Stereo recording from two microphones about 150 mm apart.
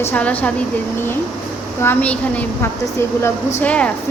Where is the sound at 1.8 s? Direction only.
10° left (ahead or behind).